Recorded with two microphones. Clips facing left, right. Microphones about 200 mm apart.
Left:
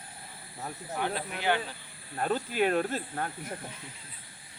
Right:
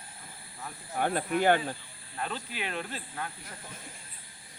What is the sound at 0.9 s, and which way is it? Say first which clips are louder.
Speech: right 6 dB; 50° right (ahead or behind).